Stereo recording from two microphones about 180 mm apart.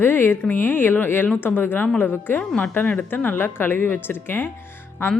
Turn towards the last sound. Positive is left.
turn(degrees=10)  # may be behind; listen again after turning